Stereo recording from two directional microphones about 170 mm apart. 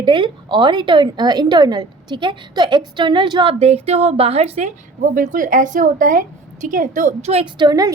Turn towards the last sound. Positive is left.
turn(degrees=-25)  # may be behind; listen again after turning